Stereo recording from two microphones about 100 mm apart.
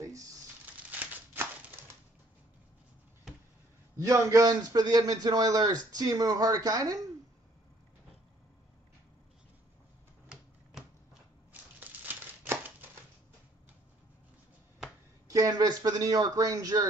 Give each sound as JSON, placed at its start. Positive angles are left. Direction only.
{"t": 0.9, "sound": "a sound", "side_deg": -20}
{"t": 3.9, "sound": "a man's voice", "side_deg": -30}
{"t": 10.2, "sound": "typewriter", "side_deg": -10}
{"t": 11.8, "sound": "crumpling", "side_deg": -20}
{"t": 15.2, "sound": "a man's voice", "side_deg": -35}